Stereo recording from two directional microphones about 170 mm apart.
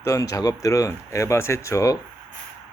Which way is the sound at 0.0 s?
20° left (ahead or behind).